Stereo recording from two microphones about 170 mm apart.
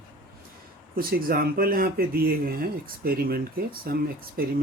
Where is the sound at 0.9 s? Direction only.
60° right (ahead or behind).